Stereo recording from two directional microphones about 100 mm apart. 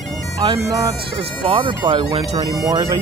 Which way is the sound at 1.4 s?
60° right (ahead or behind).